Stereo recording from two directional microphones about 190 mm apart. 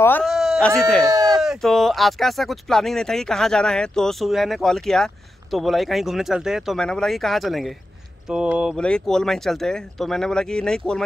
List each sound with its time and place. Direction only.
0.2 s speech: centre (ahead or behind)
1.0 s a sound: 20° right (ahead or behind)
1.4 s speech: centre (ahead or behind)